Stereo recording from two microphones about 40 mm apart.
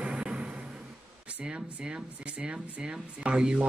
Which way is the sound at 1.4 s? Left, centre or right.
Right.